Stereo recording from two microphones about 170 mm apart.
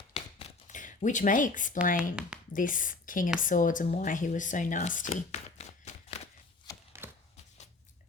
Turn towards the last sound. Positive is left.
turn(degrees=-15)  # may be behind; listen again after turning